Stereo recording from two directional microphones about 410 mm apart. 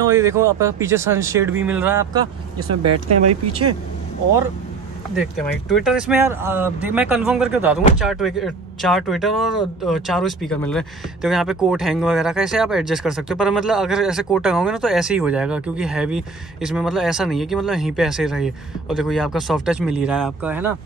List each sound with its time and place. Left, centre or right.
0.0 s speech: centre
2.7 s speech: right
5.1 s speech: centre